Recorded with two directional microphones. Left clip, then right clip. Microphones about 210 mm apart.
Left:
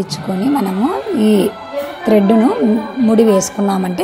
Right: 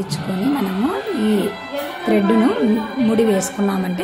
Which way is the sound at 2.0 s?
20° left (ahead or behind).